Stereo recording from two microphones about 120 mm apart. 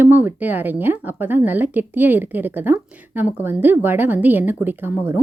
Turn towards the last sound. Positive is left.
turn(degrees=-15)  # may be behind; listen again after turning